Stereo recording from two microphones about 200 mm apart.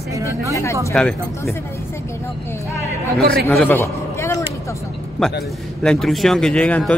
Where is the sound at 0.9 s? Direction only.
10° left (ahead or behind).